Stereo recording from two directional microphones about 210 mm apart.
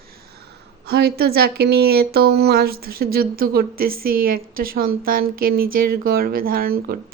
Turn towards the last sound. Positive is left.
turn(degrees=-45)  # may be behind; listen again after turning